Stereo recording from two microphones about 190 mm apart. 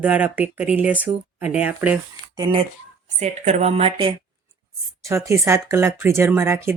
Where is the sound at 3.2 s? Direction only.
35° right (ahead or behind).